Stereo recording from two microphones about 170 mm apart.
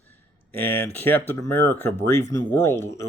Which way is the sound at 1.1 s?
10° left (ahead or behind).